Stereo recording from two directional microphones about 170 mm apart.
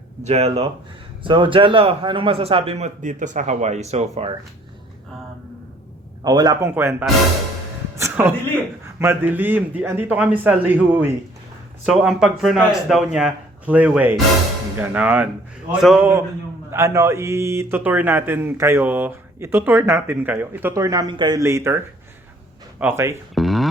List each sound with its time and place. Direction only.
0.2 s a man's voice: 40° right (ahead or behind)
6.2 s a man's voice: 20° right (ahead or behind)
7.9 s music: 15° right (ahead or behind)
9.0 s speech: 10° right (ahead or behind)
16.7 s speech: 15° right (ahead or behind)
22.8 s speech: 15° right (ahead or behind)
23.3 s a sound: centre (ahead or behind)